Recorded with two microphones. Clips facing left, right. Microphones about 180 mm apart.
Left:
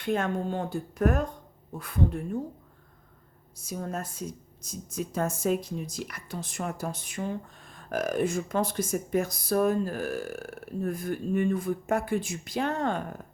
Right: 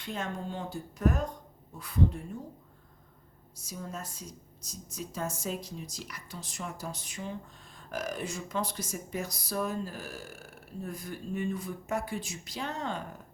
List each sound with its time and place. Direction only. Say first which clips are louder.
0.0 s speech: left 8 dB; 55° left (ahead or behind)
3.6 s speech: left 6 dB; 55° left (ahead or behind)